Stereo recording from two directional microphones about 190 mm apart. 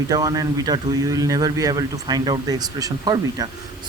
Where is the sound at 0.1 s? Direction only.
20° right (ahead or behind).